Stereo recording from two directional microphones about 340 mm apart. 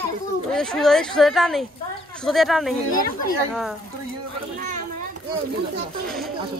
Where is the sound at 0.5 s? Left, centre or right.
Centre.